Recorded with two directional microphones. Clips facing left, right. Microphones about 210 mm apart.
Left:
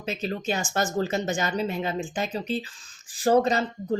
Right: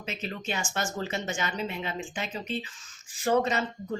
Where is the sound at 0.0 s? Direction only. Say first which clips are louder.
Left 6 dB; 35° left (ahead or behind).